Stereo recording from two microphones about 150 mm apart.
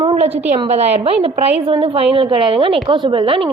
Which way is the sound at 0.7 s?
45° right (ahead or behind).